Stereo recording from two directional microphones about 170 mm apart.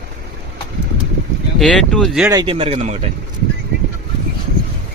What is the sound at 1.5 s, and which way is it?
Speech, centre (ahead or behind).